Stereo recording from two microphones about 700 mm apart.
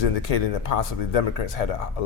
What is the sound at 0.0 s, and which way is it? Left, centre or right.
Speech, left.